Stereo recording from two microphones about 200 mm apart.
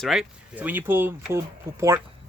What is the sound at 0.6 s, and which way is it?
Speech, 10° right (ahead or behind).